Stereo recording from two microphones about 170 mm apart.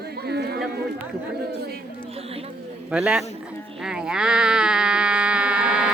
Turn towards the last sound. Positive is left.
turn(degrees=-5)  # may be behind; listen again after turning